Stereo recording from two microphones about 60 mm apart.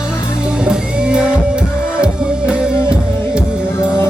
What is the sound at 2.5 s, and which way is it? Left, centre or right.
Music, centre.